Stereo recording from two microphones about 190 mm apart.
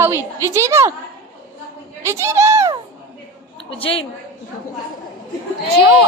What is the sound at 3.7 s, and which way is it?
Music, 30° left (ahead or behind).